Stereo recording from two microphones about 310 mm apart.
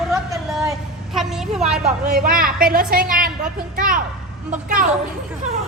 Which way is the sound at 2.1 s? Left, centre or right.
Right.